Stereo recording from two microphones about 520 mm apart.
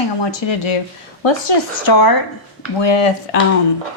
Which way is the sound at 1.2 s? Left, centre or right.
Left.